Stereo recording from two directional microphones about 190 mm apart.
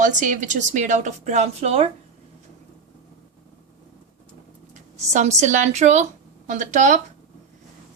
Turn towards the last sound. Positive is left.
turn(degrees=-40)  # may be behind; listen again after turning